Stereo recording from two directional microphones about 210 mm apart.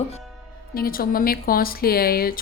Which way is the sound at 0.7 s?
45° left (ahead or behind).